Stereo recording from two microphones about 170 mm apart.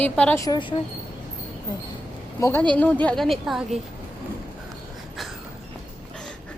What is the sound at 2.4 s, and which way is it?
A woman's voice, 10° left (ahead or behind).